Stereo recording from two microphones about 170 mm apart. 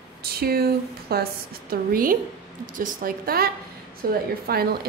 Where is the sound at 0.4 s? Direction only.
65° right (ahead or behind).